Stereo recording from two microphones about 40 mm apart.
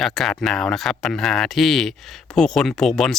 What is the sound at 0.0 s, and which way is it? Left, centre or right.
Speech, centre.